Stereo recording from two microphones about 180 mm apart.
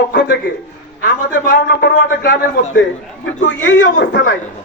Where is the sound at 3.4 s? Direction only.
90° left.